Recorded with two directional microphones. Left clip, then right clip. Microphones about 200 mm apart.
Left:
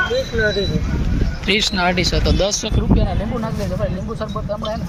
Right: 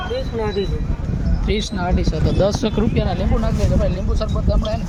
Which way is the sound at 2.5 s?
50° right (ahead or behind).